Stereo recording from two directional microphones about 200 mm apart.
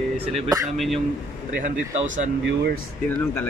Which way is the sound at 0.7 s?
Centre (ahead or behind).